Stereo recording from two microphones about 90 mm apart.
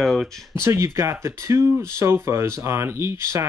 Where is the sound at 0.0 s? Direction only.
Centre (ahead or behind).